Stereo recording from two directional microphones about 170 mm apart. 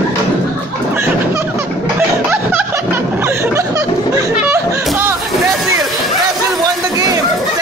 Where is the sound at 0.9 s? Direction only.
15° right (ahead or behind).